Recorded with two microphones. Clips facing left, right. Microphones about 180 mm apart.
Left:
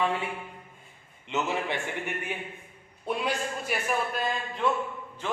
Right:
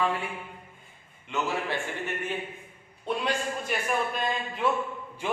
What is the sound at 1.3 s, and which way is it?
A man's voice, 15° left (ahead or behind).